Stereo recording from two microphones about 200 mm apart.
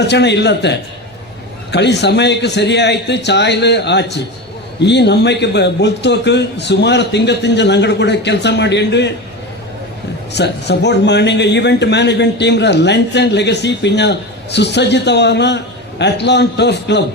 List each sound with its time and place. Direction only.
0.1 s a man's voice: 60° left (ahead or behind)
10.3 s a man's voice: 60° left (ahead or behind)